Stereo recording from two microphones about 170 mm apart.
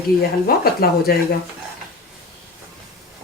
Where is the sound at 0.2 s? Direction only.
60° left (ahead or behind).